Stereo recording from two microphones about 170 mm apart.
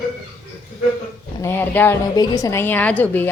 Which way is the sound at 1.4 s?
15° left (ahead or behind).